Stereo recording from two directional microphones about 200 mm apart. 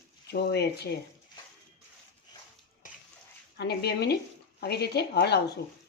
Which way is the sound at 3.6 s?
55° left (ahead or behind).